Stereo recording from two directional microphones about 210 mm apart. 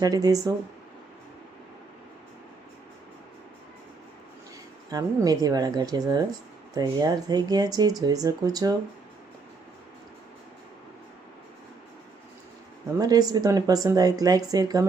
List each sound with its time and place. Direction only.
0.0 s speech: 15° right (ahead or behind)
4.9 s speech: 15° right (ahead or behind)
13.0 s speech: 15° right (ahead or behind)